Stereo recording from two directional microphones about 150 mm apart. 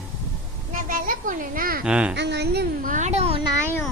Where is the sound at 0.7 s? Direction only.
65° right (ahead or behind).